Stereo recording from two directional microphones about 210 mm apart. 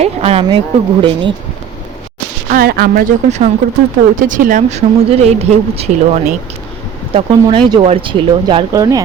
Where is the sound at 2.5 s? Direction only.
45° right (ahead or behind).